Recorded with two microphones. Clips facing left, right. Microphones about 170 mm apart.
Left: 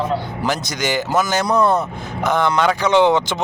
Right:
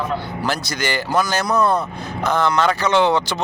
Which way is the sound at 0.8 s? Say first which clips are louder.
Left 1 dB; 20° left (ahead or behind).